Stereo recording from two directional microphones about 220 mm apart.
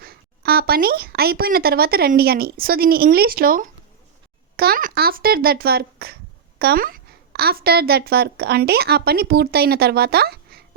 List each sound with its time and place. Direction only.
0.0 s a woman's voice: 45° right (ahead or behind)